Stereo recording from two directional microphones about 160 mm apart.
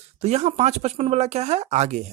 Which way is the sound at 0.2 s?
40° right (ahead or behind).